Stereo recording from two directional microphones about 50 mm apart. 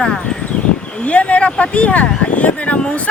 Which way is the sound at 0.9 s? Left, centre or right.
Left.